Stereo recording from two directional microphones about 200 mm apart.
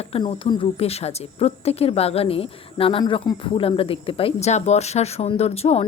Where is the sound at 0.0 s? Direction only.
30° left (ahead or behind).